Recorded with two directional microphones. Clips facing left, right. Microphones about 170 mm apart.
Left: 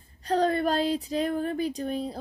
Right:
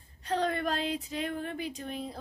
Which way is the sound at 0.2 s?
35° left (ahead or behind).